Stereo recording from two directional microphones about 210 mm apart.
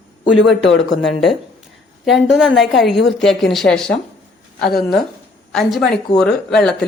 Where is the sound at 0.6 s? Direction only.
60° left (ahead or behind).